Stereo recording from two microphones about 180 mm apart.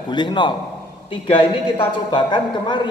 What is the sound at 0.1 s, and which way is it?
A man's voice, 25° left (ahead or behind).